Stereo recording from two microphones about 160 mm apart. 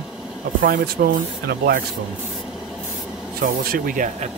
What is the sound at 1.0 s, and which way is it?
Speech, 80° right.